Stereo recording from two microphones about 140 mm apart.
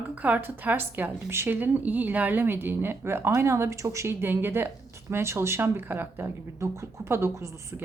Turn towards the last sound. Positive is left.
turn(degrees=-20)  # may be behind; listen again after turning